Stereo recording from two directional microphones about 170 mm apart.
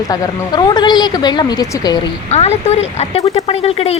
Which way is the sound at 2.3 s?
40° left (ahead or behind).